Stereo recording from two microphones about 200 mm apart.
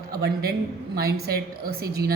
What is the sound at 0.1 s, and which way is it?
Speech, 50° right (ahead or behind).